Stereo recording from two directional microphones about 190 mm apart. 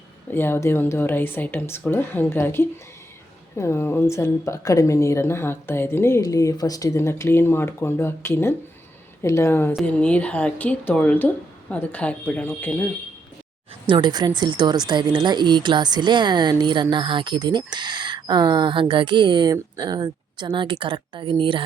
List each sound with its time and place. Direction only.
0.3 s a woman's voice: 10° left (ahead or behind)
13.8 s speech: 25° right (ahead or behind)